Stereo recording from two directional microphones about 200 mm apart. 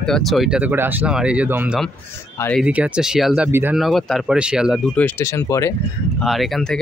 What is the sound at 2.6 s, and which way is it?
Speech, 5° right (ahead or behind).